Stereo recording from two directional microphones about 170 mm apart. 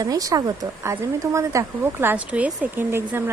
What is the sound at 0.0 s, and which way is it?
Speech, 20° right (ahead or behind).